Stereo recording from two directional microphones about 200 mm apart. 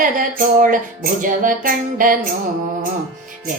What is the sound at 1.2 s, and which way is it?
Speech, 40° right (ahead or behind).